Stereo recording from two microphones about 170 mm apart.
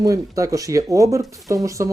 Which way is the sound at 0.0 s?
20° right (ahead or behind).